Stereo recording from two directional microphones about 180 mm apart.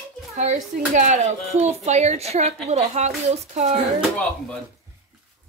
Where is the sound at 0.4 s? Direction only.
40° right (ahead or behind).